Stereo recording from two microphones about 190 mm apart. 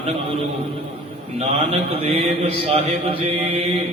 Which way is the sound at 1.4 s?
30° right (ahead or behind).